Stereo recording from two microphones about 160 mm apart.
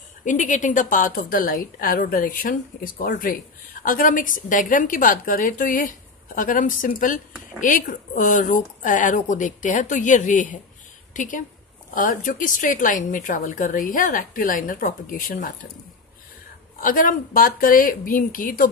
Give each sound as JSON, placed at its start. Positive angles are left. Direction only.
{"t": 0.2, "sound": "a woman's voice", "side_deg": 50}
{"t": 16.8, "sound": "a woman's voice", "side_deg": 60}